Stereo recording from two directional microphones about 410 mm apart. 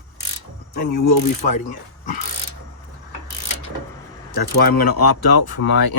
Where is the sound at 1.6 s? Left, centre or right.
Centre.